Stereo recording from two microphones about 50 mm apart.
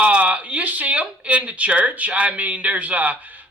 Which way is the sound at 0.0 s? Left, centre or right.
Right.